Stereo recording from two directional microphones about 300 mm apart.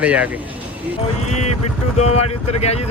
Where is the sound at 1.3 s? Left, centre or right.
Left.